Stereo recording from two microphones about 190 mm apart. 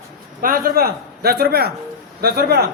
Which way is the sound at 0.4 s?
50° right (ahead or behind).